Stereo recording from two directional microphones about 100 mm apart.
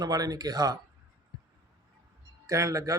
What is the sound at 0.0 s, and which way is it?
Speech, 40° right (ahead or behind).